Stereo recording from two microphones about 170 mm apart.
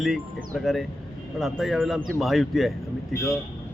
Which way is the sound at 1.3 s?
Centre (ahead or behind).